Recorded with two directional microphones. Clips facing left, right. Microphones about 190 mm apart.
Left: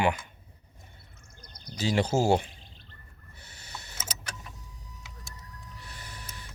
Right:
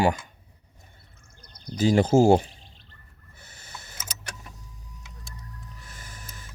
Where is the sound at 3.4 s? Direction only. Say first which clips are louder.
Even; 50° right (ahead or behind).